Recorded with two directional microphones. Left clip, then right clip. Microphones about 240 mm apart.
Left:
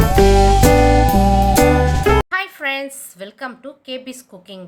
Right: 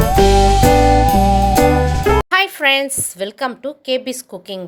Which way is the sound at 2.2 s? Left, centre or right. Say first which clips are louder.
Right 7 dB; right.